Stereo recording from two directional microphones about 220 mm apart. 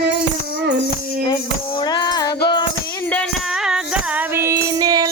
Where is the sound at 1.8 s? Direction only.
20° left (ahead or behind).